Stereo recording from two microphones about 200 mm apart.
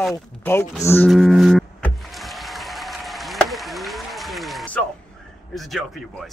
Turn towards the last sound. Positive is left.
turn(degrees=0)  # may be behind; listen again after turning